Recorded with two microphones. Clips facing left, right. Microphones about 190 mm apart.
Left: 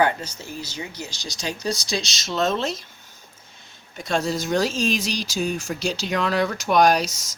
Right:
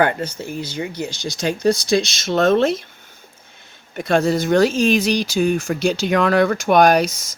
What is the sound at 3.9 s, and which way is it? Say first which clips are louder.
Speech: right 7 dB; 60° right (ahead or behind).